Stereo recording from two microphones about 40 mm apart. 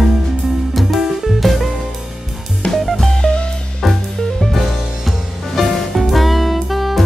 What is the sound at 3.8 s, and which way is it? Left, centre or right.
Music, centre.